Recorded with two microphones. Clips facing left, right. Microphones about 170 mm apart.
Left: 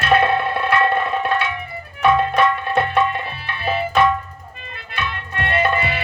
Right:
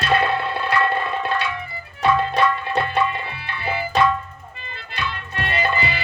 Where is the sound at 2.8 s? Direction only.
60° left (ahead or behind).